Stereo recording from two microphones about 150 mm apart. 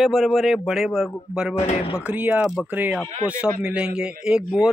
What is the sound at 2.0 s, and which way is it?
Speech, 10° right (ahead or behind).